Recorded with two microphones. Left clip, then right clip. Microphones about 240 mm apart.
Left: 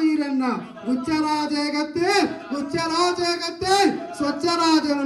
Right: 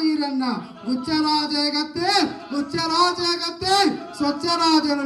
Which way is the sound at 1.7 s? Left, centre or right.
Right.